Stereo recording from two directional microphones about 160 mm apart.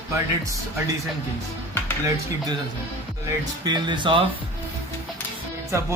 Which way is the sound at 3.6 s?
30° right (ahead or behind).